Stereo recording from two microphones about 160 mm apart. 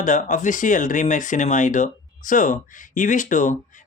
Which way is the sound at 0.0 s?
55° left (ahead or behind).